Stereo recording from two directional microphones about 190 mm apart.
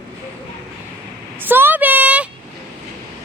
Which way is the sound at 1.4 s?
10° right (ahead or behind).